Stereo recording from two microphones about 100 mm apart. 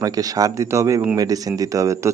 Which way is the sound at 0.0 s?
35° right (ahead or behind).